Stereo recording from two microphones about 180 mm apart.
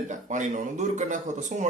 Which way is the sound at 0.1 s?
45° right (ahead or behind).